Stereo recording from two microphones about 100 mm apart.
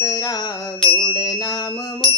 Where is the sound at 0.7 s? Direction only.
60° left (ahead or behind).